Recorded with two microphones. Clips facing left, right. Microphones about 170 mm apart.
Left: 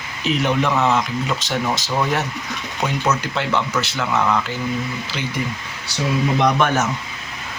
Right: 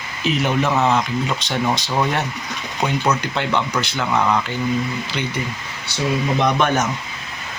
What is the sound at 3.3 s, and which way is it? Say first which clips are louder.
Speech: even; centre (ahead or behind).